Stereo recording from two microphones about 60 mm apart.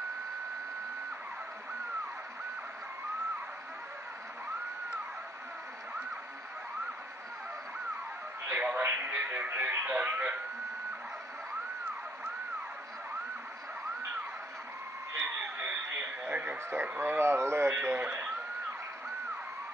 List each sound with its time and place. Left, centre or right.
8.5 s speech: right
15.6 s a sound: right
17.7 s speech: right